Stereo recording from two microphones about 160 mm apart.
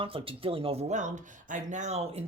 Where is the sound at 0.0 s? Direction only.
35° right (ahead or behind).